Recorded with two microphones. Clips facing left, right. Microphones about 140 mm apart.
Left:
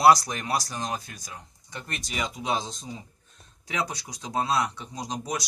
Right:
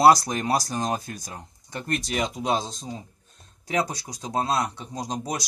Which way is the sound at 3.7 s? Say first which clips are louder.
Right 5 dB; 40° right (ahead or behind).